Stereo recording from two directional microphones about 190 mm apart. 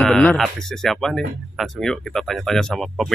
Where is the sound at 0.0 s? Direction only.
5° left (ahead or behind).